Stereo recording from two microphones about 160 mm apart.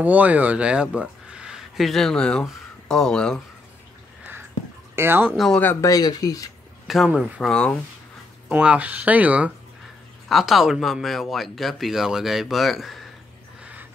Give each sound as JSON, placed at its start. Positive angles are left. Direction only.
{"t": 0.0, "sound": "speech", "side_deg": -10}
{"t": 4.9, "sound": "speech", "side_deg": -15}
{"t": 5.3, "sound": "speech", "side_deg": 5}
{"t": 6.9, "sound": "speech", "side_deg": -5}
{"t": 8.5, "sound": "speech", "side_deg": -5}
{"t": 13.6, "sound": "a sound", "side_deg": -10}